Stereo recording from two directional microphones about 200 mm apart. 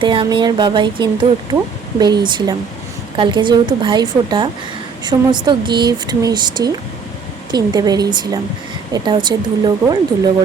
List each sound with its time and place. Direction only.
0.0 s speech: 25° right (ahead or behind)